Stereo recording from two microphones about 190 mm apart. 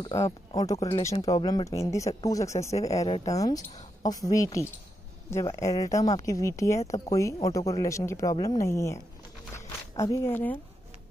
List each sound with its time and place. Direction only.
0.0 s a woman's voice: 15° left (ahead or behind)